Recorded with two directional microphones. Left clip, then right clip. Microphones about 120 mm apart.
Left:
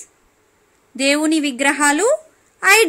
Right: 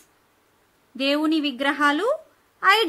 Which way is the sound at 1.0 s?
25° left (ahead or behind).